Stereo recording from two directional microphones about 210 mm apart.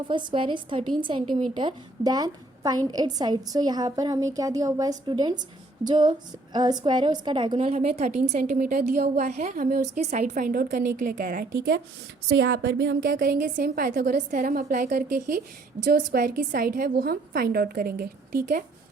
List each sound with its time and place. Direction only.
0.1 s a woman's voice: 20° right (ahead or behind); by 13.1 s 55° right (ahead or behind)
13.1 s a woman's voice: 45° right (ahead or behind)